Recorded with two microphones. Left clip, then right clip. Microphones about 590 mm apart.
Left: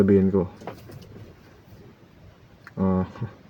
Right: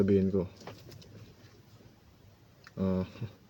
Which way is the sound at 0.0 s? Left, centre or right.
Right.